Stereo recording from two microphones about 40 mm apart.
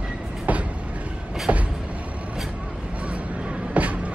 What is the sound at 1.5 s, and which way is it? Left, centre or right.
Vehicle, right.